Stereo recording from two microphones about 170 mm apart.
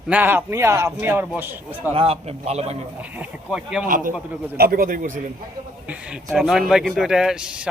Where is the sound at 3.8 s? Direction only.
55° right (ahead or behind).